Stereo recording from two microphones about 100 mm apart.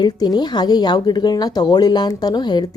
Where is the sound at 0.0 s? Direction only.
45° left (ahead or behind).